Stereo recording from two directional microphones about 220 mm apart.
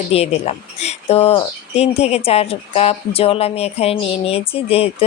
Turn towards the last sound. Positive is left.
turn(degrees=25)  # may be behind; listen again after turning